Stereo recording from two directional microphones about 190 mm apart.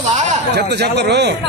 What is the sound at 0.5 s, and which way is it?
Speech, 60° right (ahead or behind).